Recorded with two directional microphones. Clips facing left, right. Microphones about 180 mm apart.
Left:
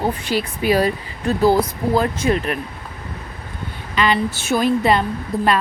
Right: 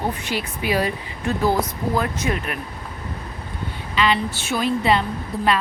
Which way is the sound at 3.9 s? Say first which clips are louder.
Left 2 dB; 50° left (ahead or behind).